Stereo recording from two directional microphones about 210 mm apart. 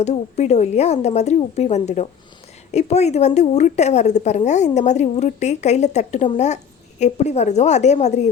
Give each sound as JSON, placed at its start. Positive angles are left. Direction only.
{"t": 0.0, "sound": "a woman's voice", "side_deg": 30}